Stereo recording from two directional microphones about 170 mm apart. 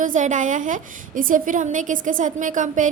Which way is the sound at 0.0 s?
50° right (ahead or behind).